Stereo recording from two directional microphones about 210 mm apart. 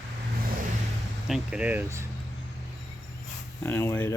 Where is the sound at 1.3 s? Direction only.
5° right (ahead or behind).